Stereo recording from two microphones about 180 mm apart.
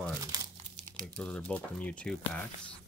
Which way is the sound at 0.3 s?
20° right (ahead or behind).